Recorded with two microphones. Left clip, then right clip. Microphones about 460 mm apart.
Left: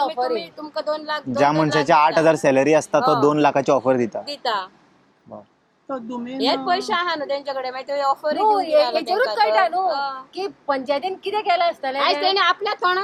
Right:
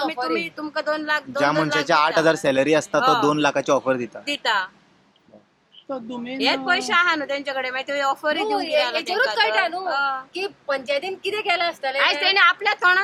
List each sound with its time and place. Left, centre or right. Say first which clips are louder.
0.0 s a woman's voice: left 2 dB; right
1.4 s speech: left 4 dB; centre
4.3 s a woman's voice: right 2 dB; right
6.4 s a woman's voice: even; right